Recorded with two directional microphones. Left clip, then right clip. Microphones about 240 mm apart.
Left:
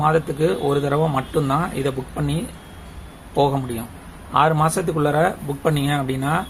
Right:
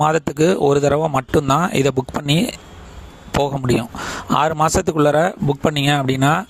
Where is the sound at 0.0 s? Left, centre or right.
Right.